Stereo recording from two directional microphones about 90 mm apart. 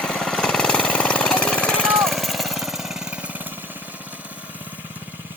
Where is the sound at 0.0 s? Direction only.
5° left (ahead or behind).